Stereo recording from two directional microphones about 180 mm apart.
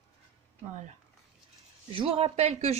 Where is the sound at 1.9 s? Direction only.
30° right (ahead or behind).